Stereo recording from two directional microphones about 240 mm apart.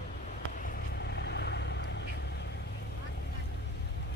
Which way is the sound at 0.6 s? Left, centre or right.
Left.